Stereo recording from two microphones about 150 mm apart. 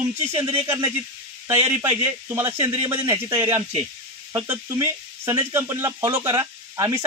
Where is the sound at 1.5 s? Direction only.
20° right (ahead or behind).